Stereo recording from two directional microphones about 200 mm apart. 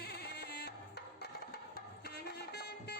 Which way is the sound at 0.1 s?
55° left (ahead or behind).